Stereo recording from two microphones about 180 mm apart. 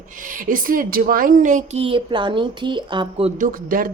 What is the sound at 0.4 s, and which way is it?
Speech, 50° right (ahead or behind).